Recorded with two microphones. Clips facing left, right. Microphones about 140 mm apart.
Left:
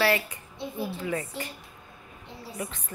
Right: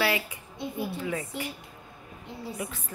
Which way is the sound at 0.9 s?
Centre (ahead or behind).